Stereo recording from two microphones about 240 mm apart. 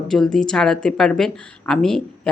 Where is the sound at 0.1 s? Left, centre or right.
Centre.